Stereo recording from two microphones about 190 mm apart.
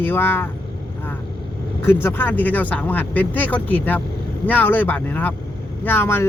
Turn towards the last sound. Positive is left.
turn(degrees=10)  # may be behind; listen again after turning